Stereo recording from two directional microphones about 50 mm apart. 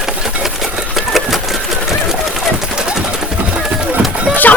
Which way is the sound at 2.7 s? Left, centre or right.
Centre.